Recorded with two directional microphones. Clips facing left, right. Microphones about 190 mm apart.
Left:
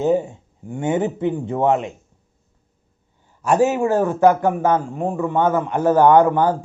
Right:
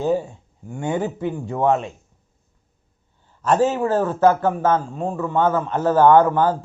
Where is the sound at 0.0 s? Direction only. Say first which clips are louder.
Left 3 dB; 20° left (ahead or behind).